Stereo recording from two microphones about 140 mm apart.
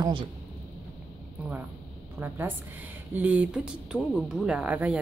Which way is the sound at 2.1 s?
15° right (ahead or behind).